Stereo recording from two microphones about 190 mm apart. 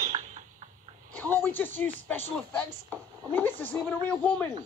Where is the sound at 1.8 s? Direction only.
10° left (ahead or behind).